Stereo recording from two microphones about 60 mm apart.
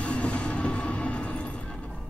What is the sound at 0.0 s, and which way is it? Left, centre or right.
Music, left.